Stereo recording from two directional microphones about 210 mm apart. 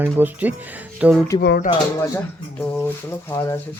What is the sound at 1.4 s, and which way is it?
Speech, 50° left (ahead or behind).